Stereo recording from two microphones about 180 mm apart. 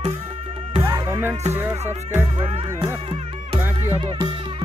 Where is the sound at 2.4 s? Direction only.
30° right (ahead or behind).